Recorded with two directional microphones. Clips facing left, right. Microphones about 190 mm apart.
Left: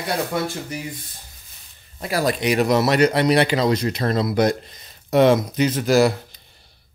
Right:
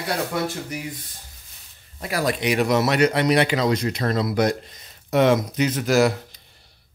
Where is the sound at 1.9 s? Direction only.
30° left (ahead or behind).